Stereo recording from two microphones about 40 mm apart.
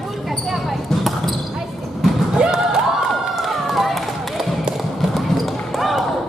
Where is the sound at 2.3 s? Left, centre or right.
Centre.